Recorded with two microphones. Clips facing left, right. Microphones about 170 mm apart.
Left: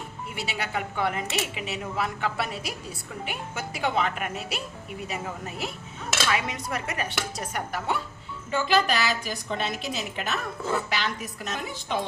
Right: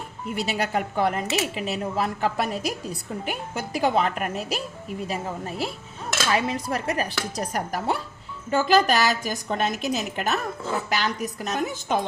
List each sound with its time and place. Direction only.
0.3 s a woman's voice: 40° right (ahead or behind)